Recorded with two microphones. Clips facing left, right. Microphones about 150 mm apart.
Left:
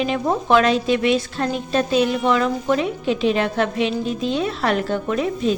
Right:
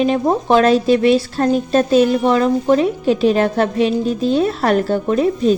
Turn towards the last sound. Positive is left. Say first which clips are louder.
# right 6 dB
turn(degrees=-40)  # may be behind; listen again after turning